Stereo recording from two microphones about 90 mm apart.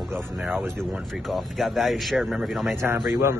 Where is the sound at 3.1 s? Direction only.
25° right (ahead or behind).